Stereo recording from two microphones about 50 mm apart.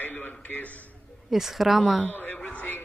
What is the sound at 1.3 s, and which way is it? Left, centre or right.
Speech, centre.